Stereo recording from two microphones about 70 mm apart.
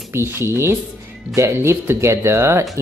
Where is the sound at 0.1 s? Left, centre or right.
Right.